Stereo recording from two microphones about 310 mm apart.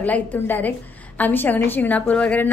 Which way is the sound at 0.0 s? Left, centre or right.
Centre.